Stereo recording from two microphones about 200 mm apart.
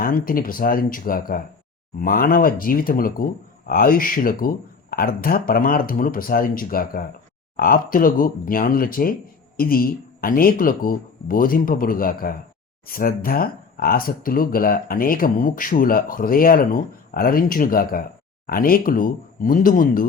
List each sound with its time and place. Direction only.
0.0 s speech: 45° left (ahead or behind)